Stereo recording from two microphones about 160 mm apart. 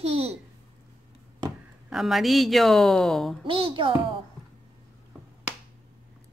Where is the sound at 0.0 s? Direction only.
40° right (ahead or behind).